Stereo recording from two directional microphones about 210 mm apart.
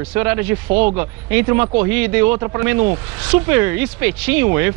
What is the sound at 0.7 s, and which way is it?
Speech, 35° right (ahead or behind).